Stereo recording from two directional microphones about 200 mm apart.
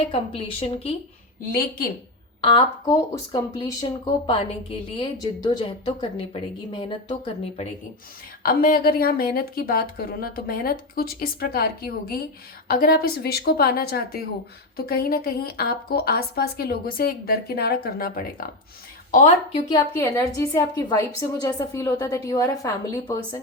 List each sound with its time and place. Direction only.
0.1 s a woman's voice: 30° left (ahead or behind)
1.5 s a woman's voice: 45° left (ahead or behind)
2.4 s a woman's voice: 25° left (ahead or behind)
8.4 s a woman's voice: 45° left (ahead or behind)
19.6 s a woman's voice: 15° left (ahead or behind)